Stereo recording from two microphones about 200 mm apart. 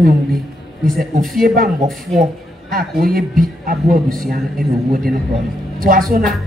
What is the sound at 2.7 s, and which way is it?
A man's voice, 45° right (ahead or behind).